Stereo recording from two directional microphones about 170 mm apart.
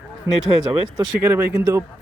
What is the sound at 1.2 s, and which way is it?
Speech, 15° right (ahead or behind).